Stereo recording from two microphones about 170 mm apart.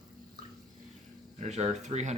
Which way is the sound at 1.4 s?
40° right (ahead or behind).